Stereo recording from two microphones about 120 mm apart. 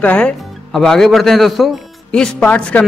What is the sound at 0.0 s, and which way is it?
Speech, 10° left (ahead or behind).